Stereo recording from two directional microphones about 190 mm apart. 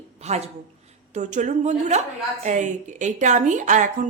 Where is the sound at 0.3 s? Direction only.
35° right (ahead or behind).